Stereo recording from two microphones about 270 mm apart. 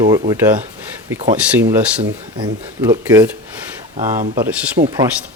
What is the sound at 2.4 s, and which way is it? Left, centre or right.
Speech, centre.